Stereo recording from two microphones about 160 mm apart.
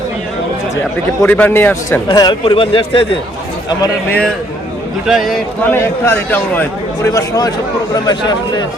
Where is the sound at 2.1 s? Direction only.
25° left (ahead or behind).